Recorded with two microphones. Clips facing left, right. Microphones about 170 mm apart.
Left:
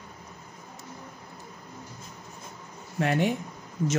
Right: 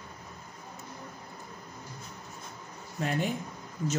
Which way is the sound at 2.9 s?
70° left (ahead or behind).